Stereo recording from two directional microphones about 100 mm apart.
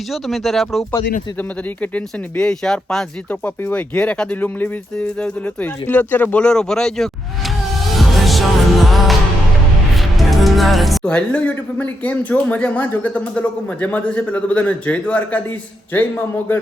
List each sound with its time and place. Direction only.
0.1 s speech: centre (ahead or behind)
1.4 s speech: 15° left (ahead or behind)
7.9 s music: centre (ahead or behind)
11.1 s a man's voice: 10° left (ahead or behind)